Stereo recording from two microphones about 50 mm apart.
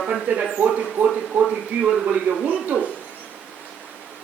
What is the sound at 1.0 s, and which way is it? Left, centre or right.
Speech, centre.